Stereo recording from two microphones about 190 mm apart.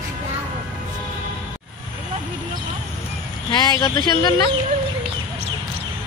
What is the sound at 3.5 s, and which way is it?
Speech, 20° left (ahead or behind).